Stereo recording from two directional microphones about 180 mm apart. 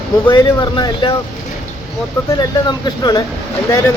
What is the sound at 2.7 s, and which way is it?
Speech, 20° left (ahead or behind).